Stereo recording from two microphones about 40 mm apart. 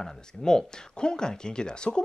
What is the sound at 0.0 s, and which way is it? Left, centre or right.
Speech, centre.